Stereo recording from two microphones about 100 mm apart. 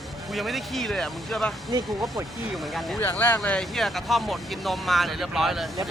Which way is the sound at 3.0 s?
20° left (ahead or behind).